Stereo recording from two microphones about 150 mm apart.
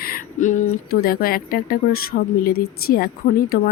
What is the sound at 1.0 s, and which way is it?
Speech, 80° left.